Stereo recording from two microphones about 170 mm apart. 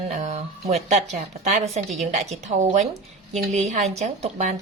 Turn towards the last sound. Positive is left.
turn(degrees=-45)  # may be behind; listen again after turning